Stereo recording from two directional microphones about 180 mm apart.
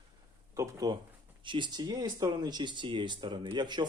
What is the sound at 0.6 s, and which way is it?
Speech, 20° right (ahead or behind).